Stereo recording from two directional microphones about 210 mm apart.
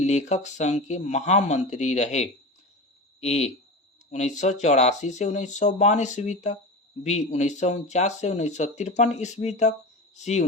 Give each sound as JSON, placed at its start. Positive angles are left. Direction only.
{"t": 0.0, "sound": "speech", "side_deg": 30}